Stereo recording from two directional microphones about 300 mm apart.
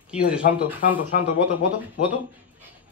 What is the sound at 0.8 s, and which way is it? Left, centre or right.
Speech, left.